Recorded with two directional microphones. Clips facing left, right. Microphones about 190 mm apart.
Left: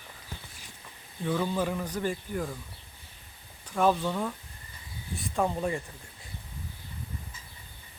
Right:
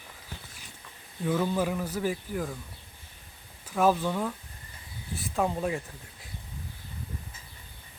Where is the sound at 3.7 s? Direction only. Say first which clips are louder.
Right 1 dB; 5° right (ahead or behind).